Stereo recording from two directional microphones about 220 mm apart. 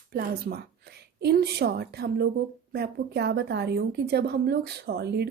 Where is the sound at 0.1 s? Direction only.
45° right (ahead or behind).